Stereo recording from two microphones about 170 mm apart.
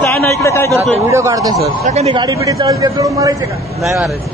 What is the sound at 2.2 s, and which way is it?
Speech, 20° right (ahead or behind).